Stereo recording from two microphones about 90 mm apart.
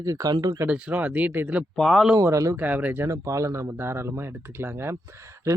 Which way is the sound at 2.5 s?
20° right (ahead or behind).